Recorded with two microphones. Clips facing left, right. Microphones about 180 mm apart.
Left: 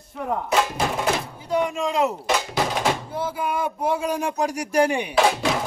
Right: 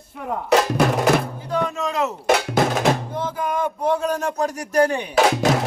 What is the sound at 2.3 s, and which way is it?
Music, 65° right (ahead or behind).